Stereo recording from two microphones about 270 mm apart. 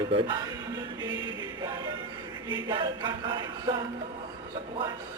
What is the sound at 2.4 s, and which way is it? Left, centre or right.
Chant, centre.